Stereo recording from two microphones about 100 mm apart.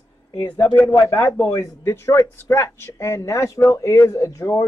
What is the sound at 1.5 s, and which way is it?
Speech, 30° left (ahead or behind).